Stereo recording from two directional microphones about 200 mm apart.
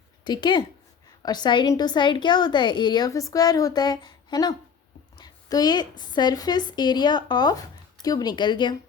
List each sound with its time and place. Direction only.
0.3 s a woman's voice: 20° left (ahead or behind)